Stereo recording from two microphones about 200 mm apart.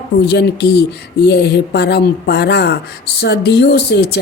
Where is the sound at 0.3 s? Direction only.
55° left (ahead or behind).